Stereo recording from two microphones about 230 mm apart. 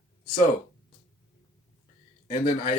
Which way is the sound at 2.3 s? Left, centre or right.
Left.